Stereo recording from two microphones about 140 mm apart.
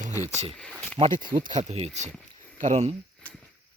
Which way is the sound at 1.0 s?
35° right (ahead or behind).